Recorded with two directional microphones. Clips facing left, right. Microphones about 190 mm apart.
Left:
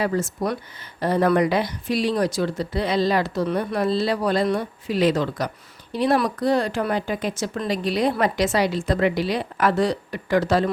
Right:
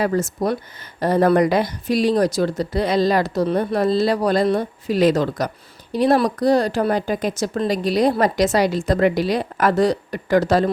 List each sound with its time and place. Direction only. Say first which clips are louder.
0.0 s speech: right 3 dB; 45° right (ahead or behind)